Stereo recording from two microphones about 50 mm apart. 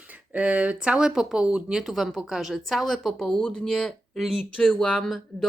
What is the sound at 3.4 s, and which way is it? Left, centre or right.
Speech, centre.